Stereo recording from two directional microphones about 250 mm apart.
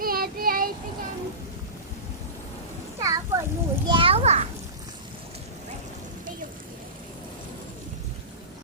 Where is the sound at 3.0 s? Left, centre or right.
Centre.